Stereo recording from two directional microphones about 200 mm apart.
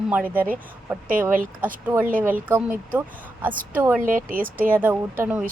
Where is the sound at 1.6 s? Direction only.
10° right (ahead or behind).